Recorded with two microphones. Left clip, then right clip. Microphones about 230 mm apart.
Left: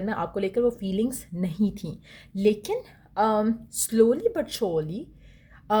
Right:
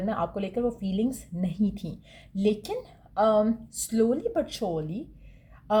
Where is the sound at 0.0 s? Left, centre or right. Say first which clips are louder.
Left 1 dB; left.